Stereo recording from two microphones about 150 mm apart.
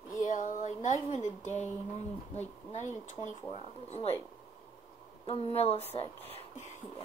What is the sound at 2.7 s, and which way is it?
A woman's voice, 55° left (ahead or behind).